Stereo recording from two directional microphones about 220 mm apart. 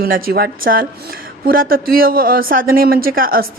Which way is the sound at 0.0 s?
40° right (ahead or behind).